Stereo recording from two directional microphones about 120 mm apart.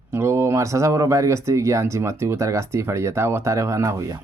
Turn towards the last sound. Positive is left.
turn(degrees=-30)  # may be behind; listen again after turning